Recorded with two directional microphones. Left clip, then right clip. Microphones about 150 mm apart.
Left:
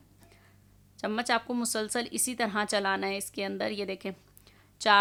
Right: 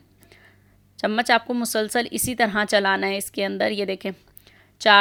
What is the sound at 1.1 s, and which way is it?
Speech, 25° right (ahead or behind).